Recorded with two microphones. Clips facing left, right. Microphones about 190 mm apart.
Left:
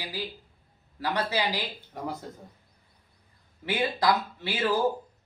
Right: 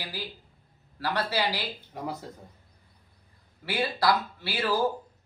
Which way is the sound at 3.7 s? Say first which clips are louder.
Left 1 dB; 20° left (ahead or behind).